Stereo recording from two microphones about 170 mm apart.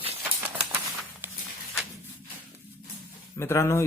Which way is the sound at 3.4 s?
15° left (ahead or behind).